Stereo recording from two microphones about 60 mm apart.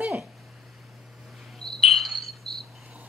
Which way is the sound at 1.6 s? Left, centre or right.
Centre.